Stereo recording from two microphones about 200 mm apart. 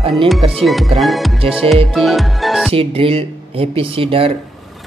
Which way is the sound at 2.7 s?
30° right (ahead or behind).